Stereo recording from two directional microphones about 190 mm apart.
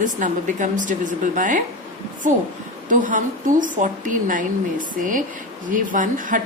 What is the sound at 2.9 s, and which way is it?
A woman's voice, 45° right (ahead or behind).